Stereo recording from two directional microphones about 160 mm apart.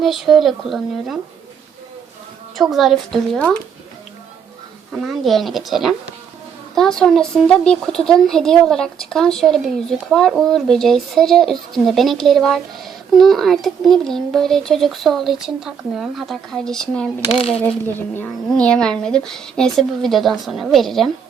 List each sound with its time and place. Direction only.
0.0 s speech: centre (ahead or behind)
2.6 s speech: centre (ahead or behind)
4.9 s speech: centre (ahead or behind)